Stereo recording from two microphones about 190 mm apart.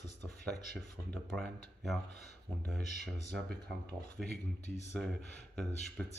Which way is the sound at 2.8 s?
35° left (ahead or behind).